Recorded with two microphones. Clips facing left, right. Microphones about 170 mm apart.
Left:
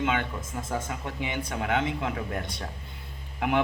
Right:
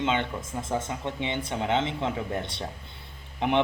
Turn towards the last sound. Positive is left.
turn(degrees=-25)  # may be behind; listen again after turning